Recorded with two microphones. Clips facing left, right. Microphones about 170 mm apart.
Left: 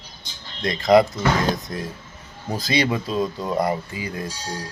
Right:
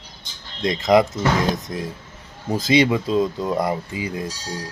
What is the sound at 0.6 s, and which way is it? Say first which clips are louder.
Speech: left 1 dB; 20° right (ahead or behind).